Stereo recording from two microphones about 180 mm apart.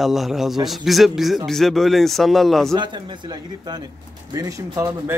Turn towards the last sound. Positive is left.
turn(degrees=-15)  # may be behind; listen again after turning